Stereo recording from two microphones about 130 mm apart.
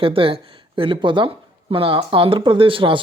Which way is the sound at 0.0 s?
45° right (ahead or behind).